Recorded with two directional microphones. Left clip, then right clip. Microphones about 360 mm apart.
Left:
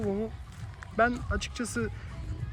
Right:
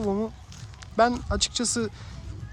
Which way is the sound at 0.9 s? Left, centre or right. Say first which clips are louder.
Right 5 dB; centre.